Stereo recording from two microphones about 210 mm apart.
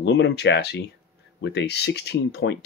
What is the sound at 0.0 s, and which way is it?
Speech, 55° left (ahead or behind).